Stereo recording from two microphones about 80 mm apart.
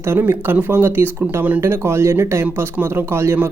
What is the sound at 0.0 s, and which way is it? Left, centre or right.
Speech, right.